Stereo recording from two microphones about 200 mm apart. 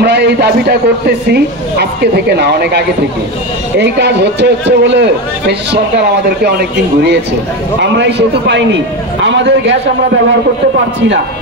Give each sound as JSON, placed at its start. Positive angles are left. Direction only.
{"t": 0.0, "sound": "a man's voice", "side_deg": -55}
{"t": 7.8, "sound": "a man's voice", "side_deg": -60}